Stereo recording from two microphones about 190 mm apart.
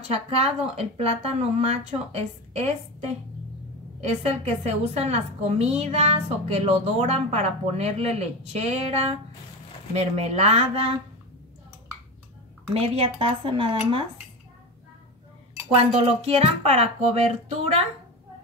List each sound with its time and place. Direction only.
0.1 s a woman's voice: 35° right (ahead or behind)
12.7 s a woman's voice: 30° right (ahead or behind)
13.2 s dishes: 30° right (ahead or behind)
16.0 s a woman's voice: 35° right (ahead or behind)